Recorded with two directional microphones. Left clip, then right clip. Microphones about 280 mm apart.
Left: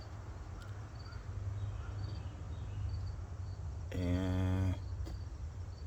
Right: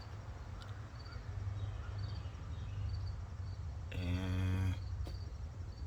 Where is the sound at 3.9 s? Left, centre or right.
Centre.